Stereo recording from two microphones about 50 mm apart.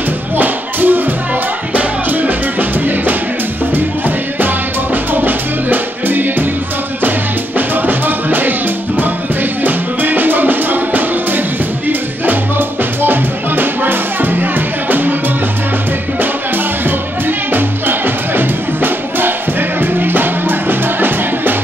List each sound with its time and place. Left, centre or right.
0.4 s music: right
4.9 s music: right
17.5 s music: right